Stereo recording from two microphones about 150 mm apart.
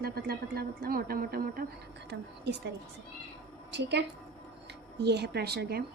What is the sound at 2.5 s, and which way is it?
Speech, 90° right.